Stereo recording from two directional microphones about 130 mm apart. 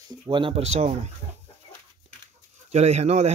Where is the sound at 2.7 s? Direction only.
55° right (ahead or behind).